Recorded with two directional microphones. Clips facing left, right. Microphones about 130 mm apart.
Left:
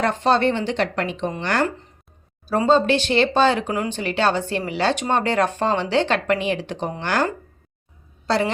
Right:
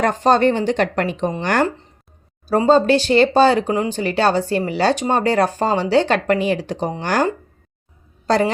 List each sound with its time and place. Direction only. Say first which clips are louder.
0.0 s speech: right 4 dB; 40° right (ahead or behind)
8.3 s speech: right 4 dB; 40° right (ahead or behind)